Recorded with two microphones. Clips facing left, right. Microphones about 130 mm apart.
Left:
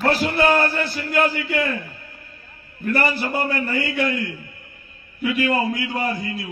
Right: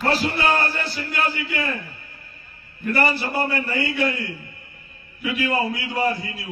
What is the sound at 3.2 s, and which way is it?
Speech, 45° left (ahead or behind).